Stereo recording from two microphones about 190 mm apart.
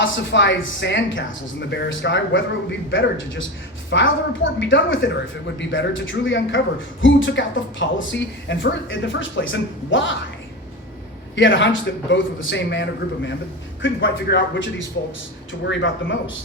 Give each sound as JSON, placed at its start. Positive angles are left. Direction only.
{"t": 0.0, "sound": "a woman's voice", "side_deg": 75}
{"t": 11.3, "sound": "speech", "side_deg": 75}